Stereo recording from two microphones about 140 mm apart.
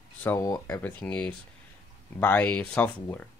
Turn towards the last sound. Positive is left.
turn(degrees=10)  # may be behind; listen again after turning